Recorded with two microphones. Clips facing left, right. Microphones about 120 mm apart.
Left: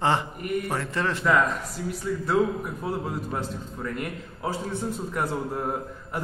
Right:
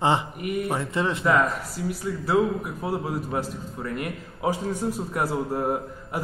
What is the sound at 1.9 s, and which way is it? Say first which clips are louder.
A man's voice: right 1 dB; 5° right (ahead or behind).